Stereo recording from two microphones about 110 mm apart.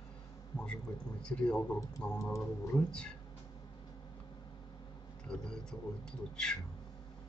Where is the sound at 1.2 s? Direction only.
10° left (ahead or behind).